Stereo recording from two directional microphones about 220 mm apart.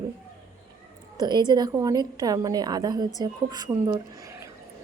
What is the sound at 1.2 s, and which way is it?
A woman's voice, 20° right (ahead or behind).